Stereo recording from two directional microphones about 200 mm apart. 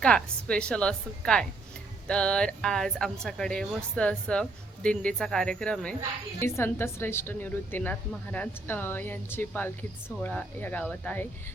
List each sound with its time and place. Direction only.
0.0 s a woman's voice: 5° left (ahead or behind)